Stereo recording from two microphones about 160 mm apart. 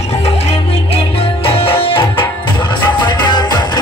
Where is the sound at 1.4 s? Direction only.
35° left (ahead or behind).